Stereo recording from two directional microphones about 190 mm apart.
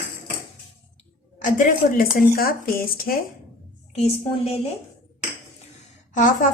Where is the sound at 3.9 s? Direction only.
35° left (ahead or behind).